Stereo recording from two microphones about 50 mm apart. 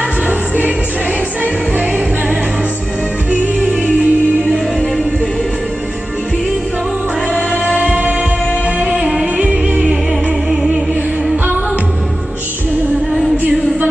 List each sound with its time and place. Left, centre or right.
0.3 s music: right
3.8 s music: right
7.6 s music: right